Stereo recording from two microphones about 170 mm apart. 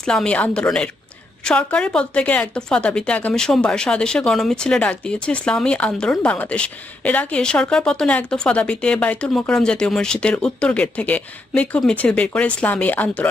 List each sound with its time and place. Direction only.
0.0 s a woman's voice: 5° left (ahead or behind)